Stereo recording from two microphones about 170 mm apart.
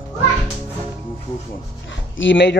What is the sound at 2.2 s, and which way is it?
Speech, 90° left.